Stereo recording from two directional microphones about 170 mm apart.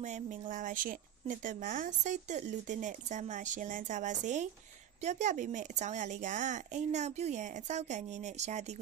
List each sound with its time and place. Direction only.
0.0 s a woman's voice: 45° right (ahead or behind)